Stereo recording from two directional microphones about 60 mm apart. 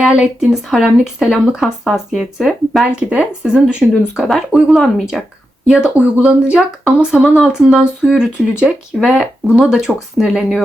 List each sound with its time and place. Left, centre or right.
0.0 s speech: centre
2.8 s speech: right
4.7 s speech: centre
5.6 s speech: centre
9.0 s speech: centre